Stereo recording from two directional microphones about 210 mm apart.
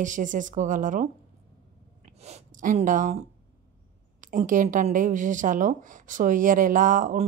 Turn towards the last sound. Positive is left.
turn(degrees=-40)  # may be behind; listen again after turning